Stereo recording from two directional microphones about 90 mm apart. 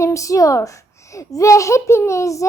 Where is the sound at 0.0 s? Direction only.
35° left (ahead or behind).